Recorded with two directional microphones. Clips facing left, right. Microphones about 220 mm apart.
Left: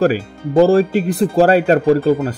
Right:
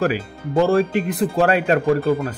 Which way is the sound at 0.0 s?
35° left (ahead or behind).